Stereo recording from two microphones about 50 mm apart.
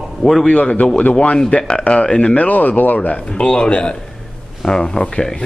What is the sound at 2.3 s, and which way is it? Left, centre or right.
Speech, left.